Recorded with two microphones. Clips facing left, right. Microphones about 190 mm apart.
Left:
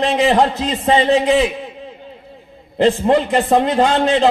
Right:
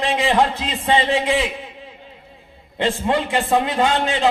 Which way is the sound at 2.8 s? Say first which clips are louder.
Left 6 dB; 40° left (ahead or behind).